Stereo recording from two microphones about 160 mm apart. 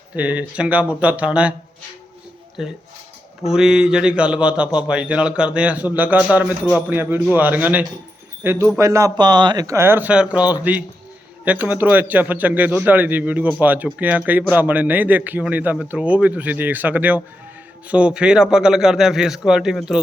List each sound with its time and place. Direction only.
0.2 s a man's voice: 10° right (ahead or behind)
2.6 s a man's voice: centre (ahead or behind)